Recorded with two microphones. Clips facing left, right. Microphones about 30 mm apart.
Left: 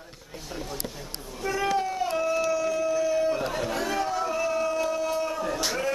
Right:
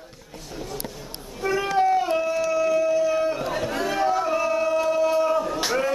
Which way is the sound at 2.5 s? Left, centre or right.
Centre.